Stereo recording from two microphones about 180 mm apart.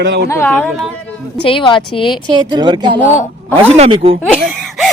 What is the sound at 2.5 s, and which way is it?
Speech, 25° right (ahead or behind).